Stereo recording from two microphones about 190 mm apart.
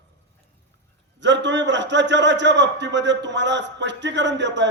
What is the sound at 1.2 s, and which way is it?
A man's voice, 70° right (ahead or behind).